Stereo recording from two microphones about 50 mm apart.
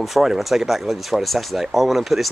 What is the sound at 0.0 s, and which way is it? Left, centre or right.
Speech, centre.